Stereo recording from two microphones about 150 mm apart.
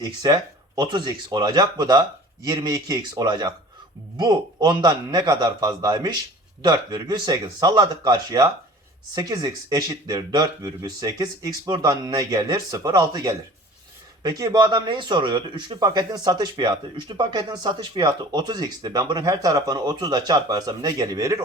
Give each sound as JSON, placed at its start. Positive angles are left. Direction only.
{"t": 0.0, "sound": "speech", "side_deg": -25}